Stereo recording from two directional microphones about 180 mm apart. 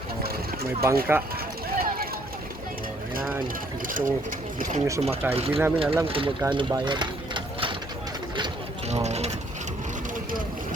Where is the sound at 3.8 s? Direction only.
50° right (ahead or behind).